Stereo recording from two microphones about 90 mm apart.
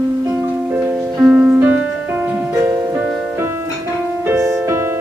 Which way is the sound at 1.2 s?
10° right (ahead or behind).